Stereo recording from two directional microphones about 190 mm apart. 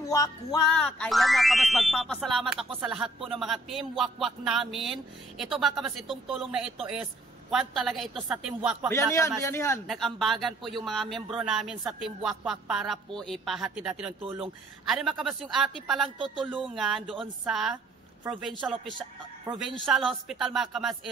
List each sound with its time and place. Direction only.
0.0 s speech: 15° left (ahead or behind)
0.7 s speech: 5° left (ahead or behind)
8.9 s speech: 15° left (ahead or behind)
9.8 s speech: centre (ahead or behind)
19.5 s speech: 20° right (ahead or behind)
19.9 s speech: centre (ahead or behind)